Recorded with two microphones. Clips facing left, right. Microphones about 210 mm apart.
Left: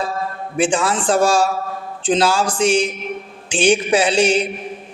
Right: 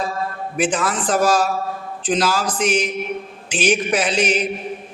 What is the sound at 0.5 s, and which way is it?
A man's voice, 30° left (ahead or behind).